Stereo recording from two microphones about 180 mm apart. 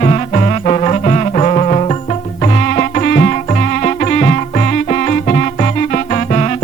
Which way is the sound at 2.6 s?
50° left (ahead or behind).